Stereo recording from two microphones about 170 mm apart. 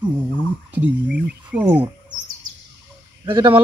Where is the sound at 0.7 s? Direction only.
10° right (ahead or behind).